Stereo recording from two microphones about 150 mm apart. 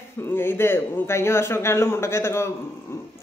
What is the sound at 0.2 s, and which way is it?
Speech, 15° left (ahead or behind).